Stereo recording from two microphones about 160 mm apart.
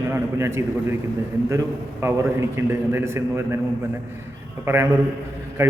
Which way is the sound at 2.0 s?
15° right (ahead or behind).